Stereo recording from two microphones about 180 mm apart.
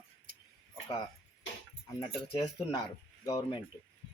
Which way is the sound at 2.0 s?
30° left (ahead or behind).